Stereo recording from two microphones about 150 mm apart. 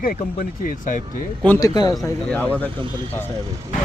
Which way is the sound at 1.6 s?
25° left (ahead or behind).